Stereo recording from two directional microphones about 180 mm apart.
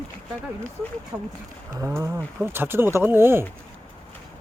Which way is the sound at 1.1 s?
10° right (ahead or behind).